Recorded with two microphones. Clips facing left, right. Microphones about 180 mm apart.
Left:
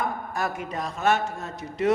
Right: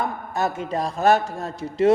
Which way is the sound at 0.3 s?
25° right (ahead or behind).